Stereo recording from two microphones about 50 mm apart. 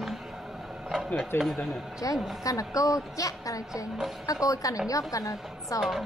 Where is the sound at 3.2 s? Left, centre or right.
Left.